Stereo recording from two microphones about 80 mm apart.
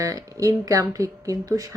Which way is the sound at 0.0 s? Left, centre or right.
Right.